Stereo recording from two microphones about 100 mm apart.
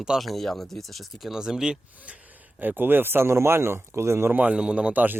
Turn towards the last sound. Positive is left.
turn(degrees=-15)  # may be behind; listen again after turning